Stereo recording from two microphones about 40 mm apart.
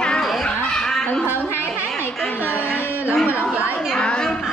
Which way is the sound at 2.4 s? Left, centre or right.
Left.